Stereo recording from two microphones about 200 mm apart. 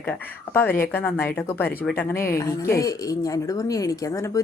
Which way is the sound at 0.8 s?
10° left (ahead or behind).